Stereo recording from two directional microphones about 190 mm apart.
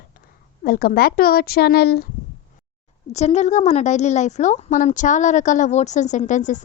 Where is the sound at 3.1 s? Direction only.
35° left (ahead or behind).